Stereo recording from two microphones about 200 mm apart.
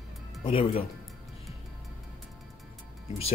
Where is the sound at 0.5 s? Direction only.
30° left (ahead or behind).